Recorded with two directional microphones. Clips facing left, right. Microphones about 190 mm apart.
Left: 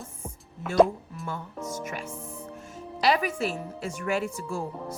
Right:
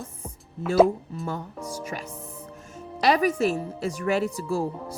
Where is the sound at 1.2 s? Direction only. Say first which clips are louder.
Even; 40° right (ahead or behind).